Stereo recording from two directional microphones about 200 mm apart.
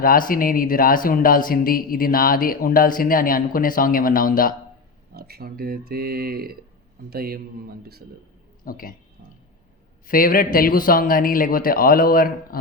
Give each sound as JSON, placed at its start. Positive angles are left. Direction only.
{"t": 0.0, "sound": "speech", "side_deg": 45}
{"t": 5.1, "sound": "speech", "side_deg": -50}
{"t": 8.6, "sound": "speech", "side_deg": 45}
{"t": 10.1, "sound": "speech", "side_deg": 45}